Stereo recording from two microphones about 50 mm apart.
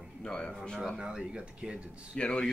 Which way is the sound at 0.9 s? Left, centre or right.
Centre.